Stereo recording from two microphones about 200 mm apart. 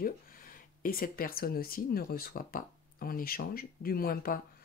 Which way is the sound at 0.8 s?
45° left (ahead or behind).